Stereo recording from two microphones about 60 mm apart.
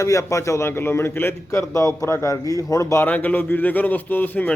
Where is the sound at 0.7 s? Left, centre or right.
Left.